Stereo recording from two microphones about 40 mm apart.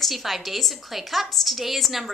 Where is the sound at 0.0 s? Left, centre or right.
Centre.